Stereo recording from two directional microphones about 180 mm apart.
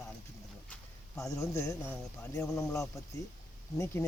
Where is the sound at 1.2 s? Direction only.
15° left (ahead or behind).